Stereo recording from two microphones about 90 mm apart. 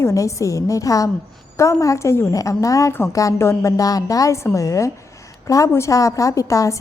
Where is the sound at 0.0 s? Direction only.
35° left (ahead or behind).